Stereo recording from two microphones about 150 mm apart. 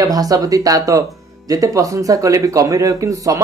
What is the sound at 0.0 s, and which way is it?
Speech, 25° right (ahead or behind).